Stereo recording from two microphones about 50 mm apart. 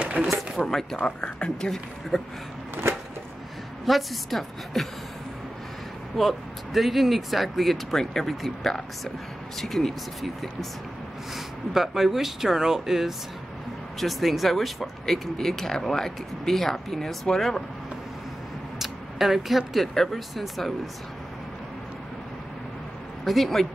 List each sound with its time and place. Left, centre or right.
0.0 s a sound: right
0.6 s speech: centre
2.1 s speech: centre
2.7 s a sound: right
3.8 s speech: centre
6.1 s speech: centre
18.8 s speech: centre
23.2 s speech: centre